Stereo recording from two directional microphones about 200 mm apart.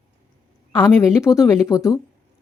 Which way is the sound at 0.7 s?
15° left (ahead or behind).